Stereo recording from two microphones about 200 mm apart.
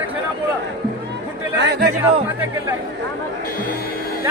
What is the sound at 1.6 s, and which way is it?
Speech, 55° right (ahead or behind).